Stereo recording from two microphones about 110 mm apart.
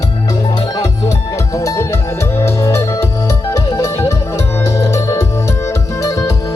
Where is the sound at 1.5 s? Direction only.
25° left (ahead or behind).